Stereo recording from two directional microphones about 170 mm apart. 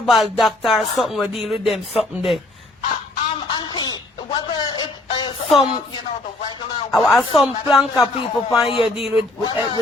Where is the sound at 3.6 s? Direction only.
25° left (ahead or behind).